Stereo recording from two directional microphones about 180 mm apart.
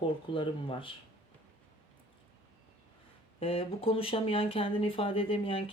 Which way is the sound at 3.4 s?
30° left (ahead or behind).